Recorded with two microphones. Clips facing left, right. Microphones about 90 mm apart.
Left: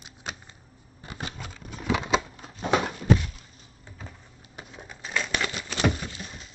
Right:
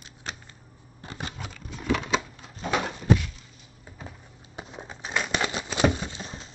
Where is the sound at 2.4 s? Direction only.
35° left (ahead or behind).